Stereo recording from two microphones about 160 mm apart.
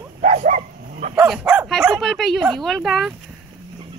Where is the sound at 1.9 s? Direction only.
Centre (ahead or behind).